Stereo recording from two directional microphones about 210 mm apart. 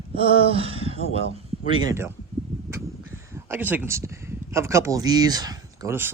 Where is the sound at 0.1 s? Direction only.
25° right (ahead or behind).